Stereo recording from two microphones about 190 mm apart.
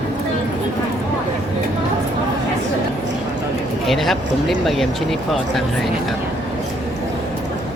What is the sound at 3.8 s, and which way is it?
Speech, centre (ahead or behind).